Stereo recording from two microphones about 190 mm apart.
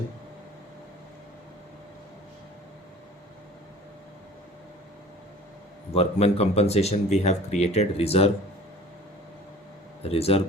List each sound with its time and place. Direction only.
5.9 s speech: 35° left (ahead or behind)
10.1 s speech: 30° left (ahead or behind)